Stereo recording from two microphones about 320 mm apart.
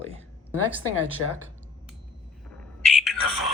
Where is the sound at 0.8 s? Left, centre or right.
Left.